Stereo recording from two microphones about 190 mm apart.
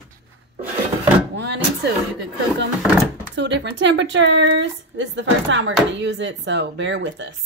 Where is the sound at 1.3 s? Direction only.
65° right (ahead or behind).